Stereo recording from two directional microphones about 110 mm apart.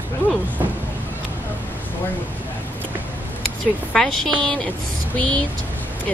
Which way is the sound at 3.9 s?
5° left (ahead or behind).